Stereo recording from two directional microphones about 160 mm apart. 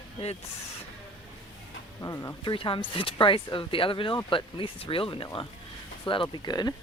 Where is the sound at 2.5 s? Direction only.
30° left (ahead or behind).